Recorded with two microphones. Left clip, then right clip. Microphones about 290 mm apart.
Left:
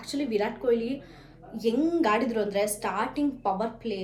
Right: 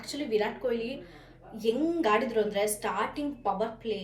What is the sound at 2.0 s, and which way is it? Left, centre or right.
Speech, centre.